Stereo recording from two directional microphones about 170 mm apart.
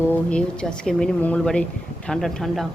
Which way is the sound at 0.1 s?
5° left (ahead or behind).